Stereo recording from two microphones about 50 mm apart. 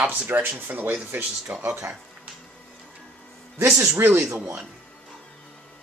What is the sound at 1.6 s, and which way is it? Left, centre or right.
Speech, right.